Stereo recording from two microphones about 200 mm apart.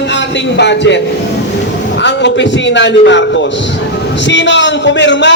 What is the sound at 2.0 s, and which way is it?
A man's voice, 65° left (ahead or behind).